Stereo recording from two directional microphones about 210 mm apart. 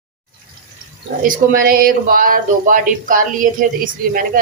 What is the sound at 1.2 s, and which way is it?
Speech, 40° right (ahead or behind).